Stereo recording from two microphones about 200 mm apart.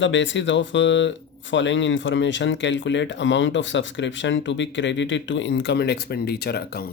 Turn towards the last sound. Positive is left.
turn(degrees=50)  # may be behind; listen again after turning